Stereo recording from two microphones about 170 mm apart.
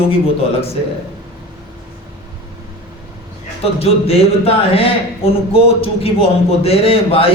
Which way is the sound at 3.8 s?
35° left (ahead or behind).